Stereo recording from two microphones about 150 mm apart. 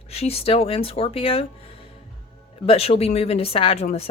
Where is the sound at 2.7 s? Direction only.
40° left (ahead or behind).